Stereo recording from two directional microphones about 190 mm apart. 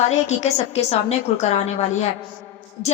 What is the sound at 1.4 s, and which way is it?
Speech, 35° left (ahead or behind).